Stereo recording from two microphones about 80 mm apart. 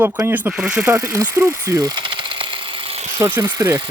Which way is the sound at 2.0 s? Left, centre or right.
Right.